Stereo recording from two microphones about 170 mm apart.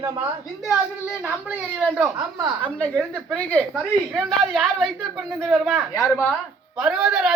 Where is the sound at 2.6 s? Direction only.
5° left (ahead or behind).